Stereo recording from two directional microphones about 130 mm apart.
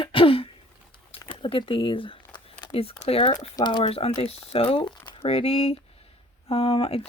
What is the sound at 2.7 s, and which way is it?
Speech, 50° left (ahead or behind).